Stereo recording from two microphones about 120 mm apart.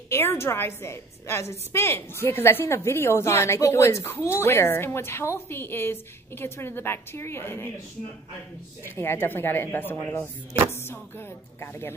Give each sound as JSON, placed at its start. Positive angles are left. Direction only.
{"t": 0.1, "sound": "a woman's voice", "side_deg": 20}
{"t": 8.8, "sound": "a woman's voice", "side_deg": 20}